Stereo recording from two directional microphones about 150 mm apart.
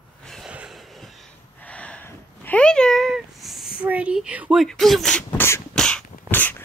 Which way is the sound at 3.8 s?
10° right (ahead or behind).